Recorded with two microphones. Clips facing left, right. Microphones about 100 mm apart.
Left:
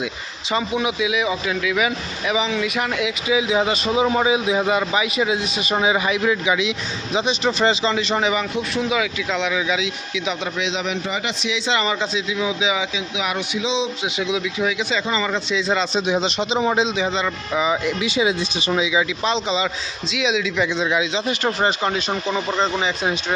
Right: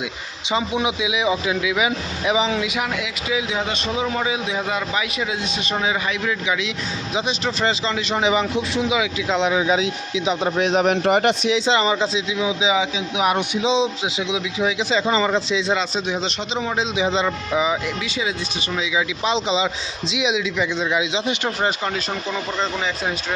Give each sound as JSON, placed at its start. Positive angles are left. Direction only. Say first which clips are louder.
{"t": 0.5, "sound": "speech", "louder": "even", "side_deg": -20}
{"t": 3.0, "sound": "a man's voice", "louder": "left 4 dB", "side_deg": 5}
{"t": 8.2, "sound": "a man's voice", "louder": "right 2 dB", "side_deg": -25}
{"t": 9.3, "sound": "speech", "louder": "right 4 dB", "side_deg": -30}
{"t": 10.6, "sound": "speech", "louder": "right 6 dB", "side_deg": -50}
{"t": 13.1, "sound": "speech", "louder": "right 5 dB", "side_deg": -40}
{"t": 14.2, "sound": "speech", "louder": "left 1 dB", "side_deg": -20}
{"t": 15.7, "sound": "a man's voice", "louder": "left 4 dB", "side_deg": -5}
{"t": 17.1, "sound": "speech", "louder": "right 2 dB", "side_deg": -25}
{"t": 17.5, "sound": "a man's voice", "louder": "left 2 dB", "side_deg": -5}
{"t": 18.0, "sound": "a man's voice", "louder": "left 5 dB", "side_deg": 15}
{"t": 19.2, "sound": "a man's voice", "louder": "right 1 dB", "side_deg": -15}
{"t": 21.6, "sound": "a man's voice", "louder": "left 2 dB", "side_deg": 0}